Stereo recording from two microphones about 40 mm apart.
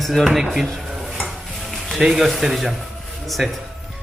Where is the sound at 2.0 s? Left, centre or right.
Centre.